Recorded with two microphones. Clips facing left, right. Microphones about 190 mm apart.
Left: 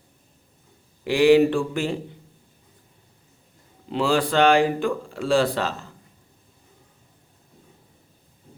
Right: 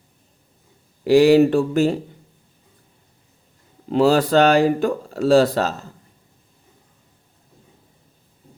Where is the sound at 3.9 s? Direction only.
40° right (ahead or behind).